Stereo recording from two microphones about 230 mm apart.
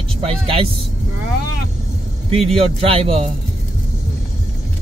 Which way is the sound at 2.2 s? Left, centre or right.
Right.